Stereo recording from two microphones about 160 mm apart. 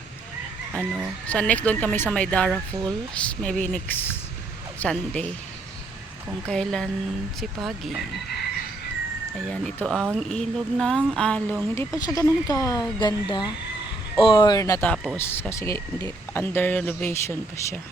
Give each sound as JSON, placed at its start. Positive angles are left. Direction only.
{"t": 1.3, "sound": "speech", "side_deg": 10}
{"t": 6.5, "sound": "speech", "side_deg": 5}
{"t": 9.5, "sound": "speech", "side_deg": 5}
{"t": 11.9, "sound": "speech", "side_deg": 20}